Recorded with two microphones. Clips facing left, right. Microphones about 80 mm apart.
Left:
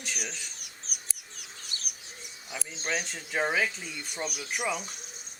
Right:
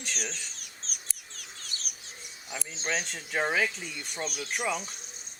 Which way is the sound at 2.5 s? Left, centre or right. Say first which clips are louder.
Even; centre.